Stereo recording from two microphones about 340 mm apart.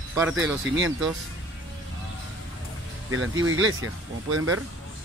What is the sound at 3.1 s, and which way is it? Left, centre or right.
Speech, right.